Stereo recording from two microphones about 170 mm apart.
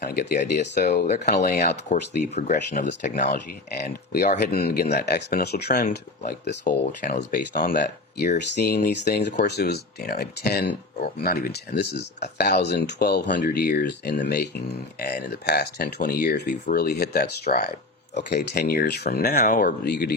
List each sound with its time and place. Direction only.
0.1 s speech: 75° left (ahead or behind)
0.3 s speech: 45° left (ahead or behind); by 1.8 s 65° left (ahead or behind)
1.9 s speech: 45° left (ahead or behind)
3.2 s speech: 75° left (ahead or behind)
7.2 s speech: 50° left (ahead or behind); by 13.3 s 75° left (ahead or behind)
13.3 s speech: 60° left (ahead or behind)
18.2 s speech: 75° left (ahead or behind)
19.4 s speech: 55° left (ahead or behind); by 20.1 s 70° left (ahead or behind)